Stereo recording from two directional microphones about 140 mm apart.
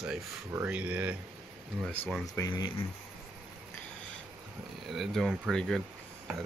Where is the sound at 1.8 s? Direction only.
10° left (ahead or behind).